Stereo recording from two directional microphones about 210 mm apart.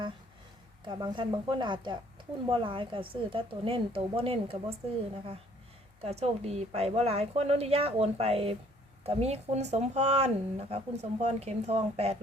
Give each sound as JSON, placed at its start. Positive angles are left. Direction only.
{"t": 0.9, "sound": "a woman's voice", "side_deg": -20}
{"t": 6.0, "sound": "a woman's voice", "side_deg": -30}